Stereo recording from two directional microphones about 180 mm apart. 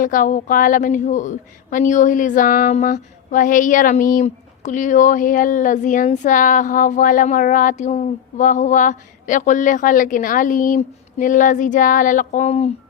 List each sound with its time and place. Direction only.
0.0 s a woman's voice: 50° left (ahead or behind)